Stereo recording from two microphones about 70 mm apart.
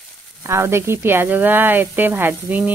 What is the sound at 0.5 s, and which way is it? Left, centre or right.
Speech, right.